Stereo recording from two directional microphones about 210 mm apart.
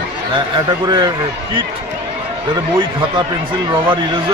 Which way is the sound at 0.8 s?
20° right (ahead or behind).